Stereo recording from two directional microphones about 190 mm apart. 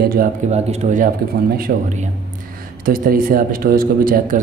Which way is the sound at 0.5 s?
35° right (ahead or behind).